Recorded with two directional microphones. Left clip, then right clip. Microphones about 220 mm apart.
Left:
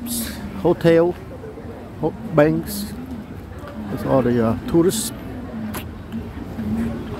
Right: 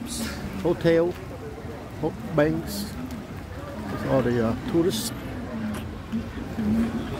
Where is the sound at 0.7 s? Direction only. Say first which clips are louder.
Left 6 dB; 20° left (ahead or behind).